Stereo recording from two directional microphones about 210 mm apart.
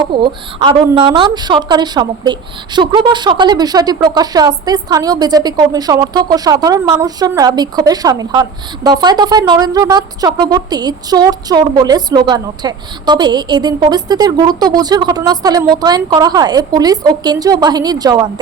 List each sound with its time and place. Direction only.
0.0 s a woman's voice: 25° right (ahead or behind)